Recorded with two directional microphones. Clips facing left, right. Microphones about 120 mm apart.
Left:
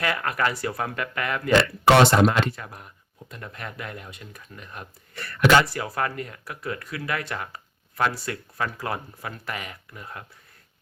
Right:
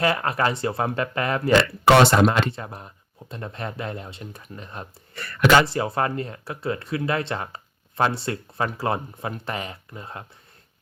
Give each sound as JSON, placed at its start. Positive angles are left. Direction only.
{"t": 0.0, "sound": "speech", "side_deg": -30}